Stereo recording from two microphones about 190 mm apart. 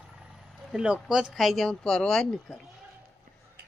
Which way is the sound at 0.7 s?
5° right (ahead or behind).